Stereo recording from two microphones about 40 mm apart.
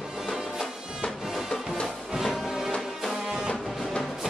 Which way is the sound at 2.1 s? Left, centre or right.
Centre.